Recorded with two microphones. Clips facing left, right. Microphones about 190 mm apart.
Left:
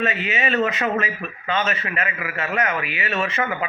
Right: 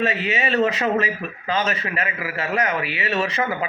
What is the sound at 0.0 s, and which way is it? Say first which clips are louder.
Speech: right 1 dB; 35° right (ahead or behind).